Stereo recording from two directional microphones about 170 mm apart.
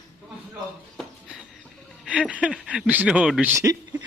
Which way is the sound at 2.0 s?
5° right (ahead or behind).